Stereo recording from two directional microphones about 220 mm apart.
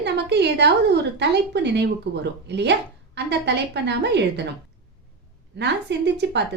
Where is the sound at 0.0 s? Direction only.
50° right (ahead or behind).